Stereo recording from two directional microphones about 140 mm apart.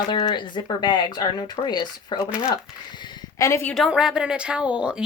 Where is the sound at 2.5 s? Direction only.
30° left (ahead or behind).